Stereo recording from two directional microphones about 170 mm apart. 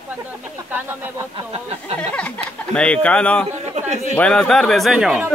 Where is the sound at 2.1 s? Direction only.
10° left (ahead or behind).